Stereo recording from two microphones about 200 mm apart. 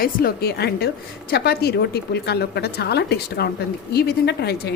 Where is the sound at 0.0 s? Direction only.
50° left (ahead or behind).